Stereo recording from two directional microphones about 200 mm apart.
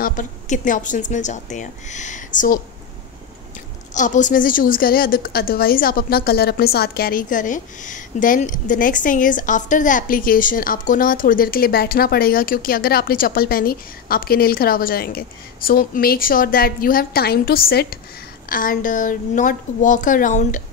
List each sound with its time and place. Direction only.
0.0 s speech: 40° left (ahead or behind)
3.9 s a woman's voice: 40° left (ahead or behind)